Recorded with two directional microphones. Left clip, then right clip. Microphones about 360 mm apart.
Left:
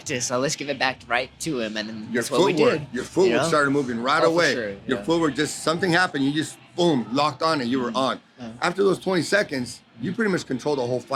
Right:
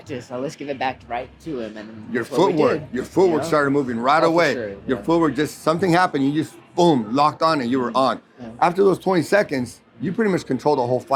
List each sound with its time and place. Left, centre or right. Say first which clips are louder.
0.1 s speech: left 4 dB; left
1.1 s speech: left 3 dB; left
2.1 s speech: right 2 dB; centre